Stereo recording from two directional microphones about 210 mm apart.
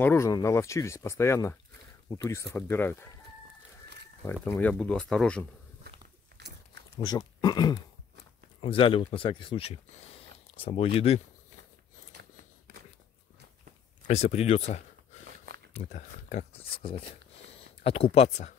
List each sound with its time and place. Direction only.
0.0 s speech: 15° left (ahead or behind)
4.3 s speech: 10° left (ahead or behind)
7.1 s speech: 20° left (ahead or behind)
14.0 s speech: 30° left (ahead or behind)
15.8 s speech: 35° left (ahead or behind)